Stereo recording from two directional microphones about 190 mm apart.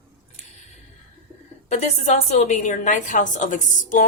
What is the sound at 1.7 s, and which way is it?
Speech, 35° left (ahead or behind).